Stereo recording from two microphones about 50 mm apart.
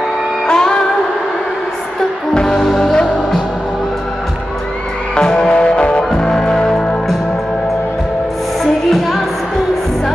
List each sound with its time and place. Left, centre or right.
0.5 s music: centre
2.4 s music: centre
5.1 s music: centre
6.0 s music: centre
8.9 s music: centre